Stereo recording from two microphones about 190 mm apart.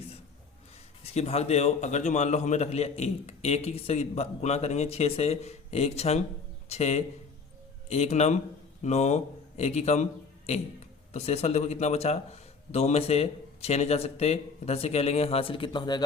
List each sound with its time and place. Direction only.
1.0 s a man's voice: 35° left (ahead or behind)